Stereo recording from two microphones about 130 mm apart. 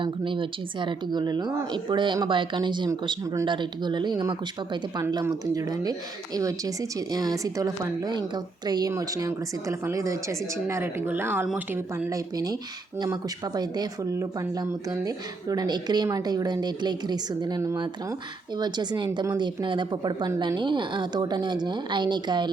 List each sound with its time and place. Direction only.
0.0 s speech: 40° right (ahead or behind)